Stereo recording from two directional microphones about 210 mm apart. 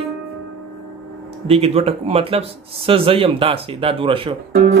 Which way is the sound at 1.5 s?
30° right (ahead or behind).